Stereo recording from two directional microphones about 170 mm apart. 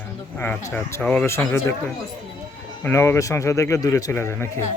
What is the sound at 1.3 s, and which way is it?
Speech, 15° left (ahead or behind).